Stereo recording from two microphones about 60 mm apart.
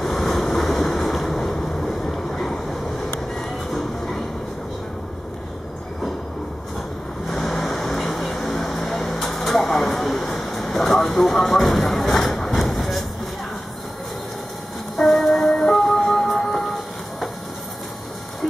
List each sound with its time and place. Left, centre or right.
0.0 s vehicle: centre
7.2 s vehicle: centre
12.0 s a sound: centre
15.0 s music: centre